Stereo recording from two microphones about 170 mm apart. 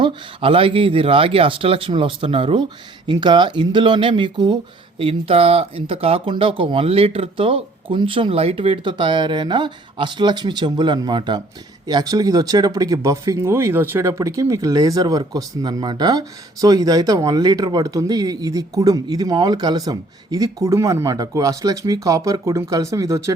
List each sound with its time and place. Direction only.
0.0 s speech: 30° right (ahead or behind)